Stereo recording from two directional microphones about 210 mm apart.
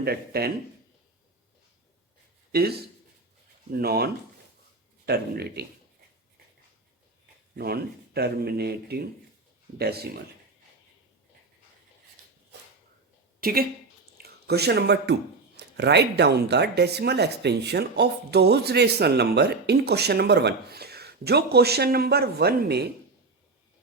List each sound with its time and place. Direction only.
0.0 s speech: 50° right (ahead or behind)
2.5 s speech: 50° right (ahead or behind)
7.5 s speech: 50° right (ahead or behind)
13.4 s speech: 45° right (ahead or behind)